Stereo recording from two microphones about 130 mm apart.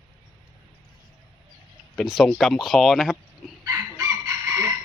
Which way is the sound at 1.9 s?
Centre (ahead or behind).